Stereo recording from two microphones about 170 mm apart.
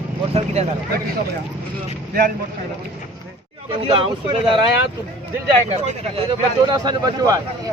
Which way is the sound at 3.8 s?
30° right (ahead or behind).